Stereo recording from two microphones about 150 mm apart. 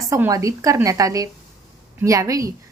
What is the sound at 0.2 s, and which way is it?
A woman's voice, 20° right (ahead or behind).